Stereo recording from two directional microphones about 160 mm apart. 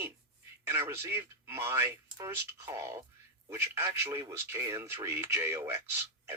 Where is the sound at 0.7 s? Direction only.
15° right (ahead or behind).